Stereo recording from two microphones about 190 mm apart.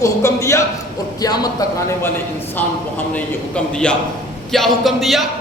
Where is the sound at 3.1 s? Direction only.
5° left (ahead or behind).